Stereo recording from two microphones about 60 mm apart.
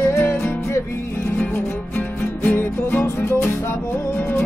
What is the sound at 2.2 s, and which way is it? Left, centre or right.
Music, left.